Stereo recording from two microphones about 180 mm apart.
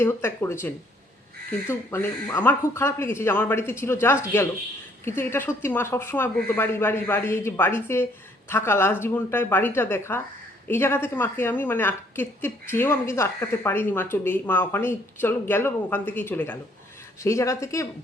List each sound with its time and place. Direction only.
0.0 s a woman's voice: 15° left (ahead or behind)